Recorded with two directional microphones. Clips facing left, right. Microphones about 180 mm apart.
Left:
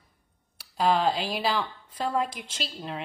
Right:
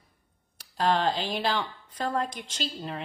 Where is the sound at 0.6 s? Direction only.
5° left (ahead or behind).